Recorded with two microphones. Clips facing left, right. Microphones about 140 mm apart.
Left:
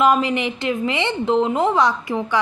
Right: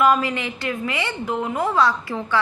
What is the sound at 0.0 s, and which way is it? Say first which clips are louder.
A woman's voice: left 2 dB; 20° left (ahead or behind).